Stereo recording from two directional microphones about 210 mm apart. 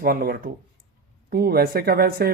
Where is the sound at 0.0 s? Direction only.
45° right (ahead or behind).